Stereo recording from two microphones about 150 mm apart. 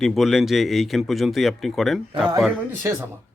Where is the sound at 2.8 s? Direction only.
15° right (ahead or behind).